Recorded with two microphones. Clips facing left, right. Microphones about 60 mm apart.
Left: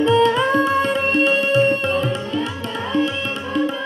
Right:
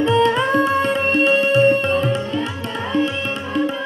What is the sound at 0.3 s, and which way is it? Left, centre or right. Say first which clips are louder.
Music: even; right.